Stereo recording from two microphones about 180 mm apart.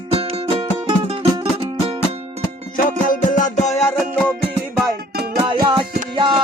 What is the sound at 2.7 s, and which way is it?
Music, 45° left (ahead or behind).